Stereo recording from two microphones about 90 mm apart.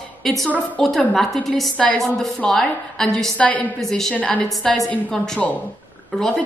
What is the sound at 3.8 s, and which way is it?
A woman's voice, 5° left (ahead or behind).